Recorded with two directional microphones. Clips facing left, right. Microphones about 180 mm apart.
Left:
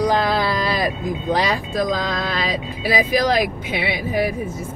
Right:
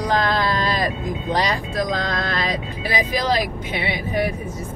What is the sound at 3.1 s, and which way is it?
Speech, 10° left (ahead or behind).